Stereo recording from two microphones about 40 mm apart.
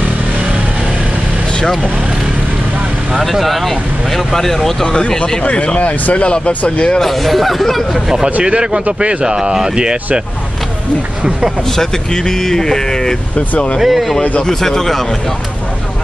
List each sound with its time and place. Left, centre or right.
3.2 s speech: centre
4.9 s speech: centre
5.4 s speech: left
7.0 s speech: centre
8.5 s speech: right
11.7 s speech: centre
13.7 s speech: centre
14.4 s speech: centre